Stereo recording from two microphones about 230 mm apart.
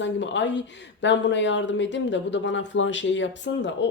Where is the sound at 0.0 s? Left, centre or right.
Left.